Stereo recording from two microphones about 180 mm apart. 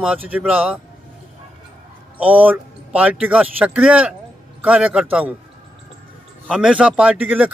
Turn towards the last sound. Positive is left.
turn(degrees=-10)  # may be behind; listen again after turning